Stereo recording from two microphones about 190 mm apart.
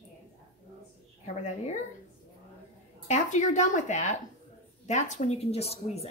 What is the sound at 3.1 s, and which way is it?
A woman's voice, 40° left (ahead or behind).